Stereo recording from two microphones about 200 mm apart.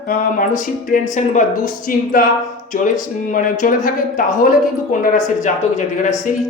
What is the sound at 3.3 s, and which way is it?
Speech, 45° left (ahead or behind).